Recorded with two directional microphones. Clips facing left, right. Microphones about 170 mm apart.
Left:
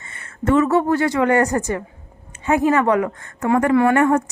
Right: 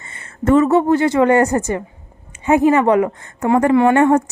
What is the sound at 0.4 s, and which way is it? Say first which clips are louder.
A woman's voice: right 3 dB; 30° right (ahead or behind).